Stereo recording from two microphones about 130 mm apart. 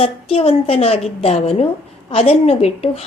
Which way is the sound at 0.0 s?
50° left (ahead or behind).